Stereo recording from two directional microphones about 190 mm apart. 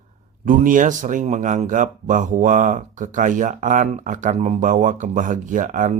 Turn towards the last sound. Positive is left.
turn(degrees=-40)  # may be behind; listen again after turning